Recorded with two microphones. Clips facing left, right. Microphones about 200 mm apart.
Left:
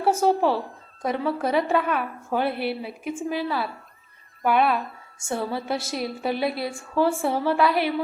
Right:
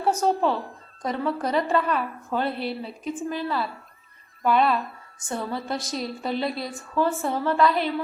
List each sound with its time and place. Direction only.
0.0 s a woman's voice: 5° left (ahead or behind)
2.5 s a woman's voice: 60° left (ahead or behind)
3.1 s a woman's voice: 10° left (ahead or behind)